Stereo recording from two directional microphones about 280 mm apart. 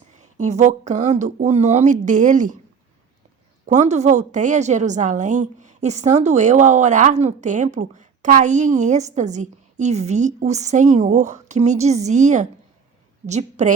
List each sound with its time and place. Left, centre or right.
0.2 s a woman's voice: right
3.7 s a woman's voice: right